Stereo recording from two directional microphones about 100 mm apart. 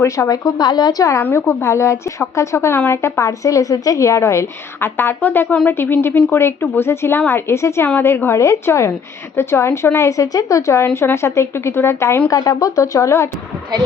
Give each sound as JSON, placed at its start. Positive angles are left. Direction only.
{"t": 0.0, "sound": "a woman's voice", "side_deg": 30}
{"t": 0.4, "sound": "a woman's voice", "side_deg": 45}
{"t": 12.3, "sound": "a woman's voice", "side_deg": 40}